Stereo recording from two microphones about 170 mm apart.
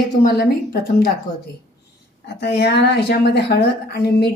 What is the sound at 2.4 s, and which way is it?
A woman's voice, 70° left (ahead or behind).